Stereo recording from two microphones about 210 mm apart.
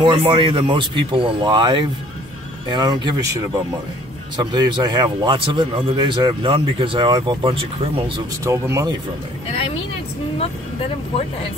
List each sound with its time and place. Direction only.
0.0 s speech: 25° right (ahead or behind)
4.4 s speech: 20° right (ahead or behind)